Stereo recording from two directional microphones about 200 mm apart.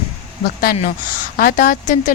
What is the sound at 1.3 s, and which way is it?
Speech, 45° left (ahead or behind).